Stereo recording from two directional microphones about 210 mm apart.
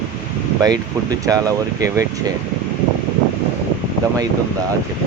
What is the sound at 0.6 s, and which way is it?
Speech, 20° right (ahead or behind).